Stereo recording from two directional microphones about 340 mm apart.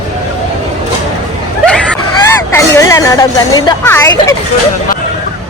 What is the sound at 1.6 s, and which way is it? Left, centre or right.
Hubbub, centre.